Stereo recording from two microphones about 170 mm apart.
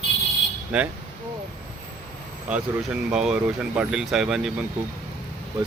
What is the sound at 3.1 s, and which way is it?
Speech, 5° right (ahead or behind).